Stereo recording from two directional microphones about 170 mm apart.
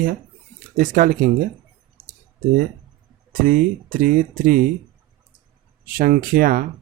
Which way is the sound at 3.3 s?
55° right (ahead or behind).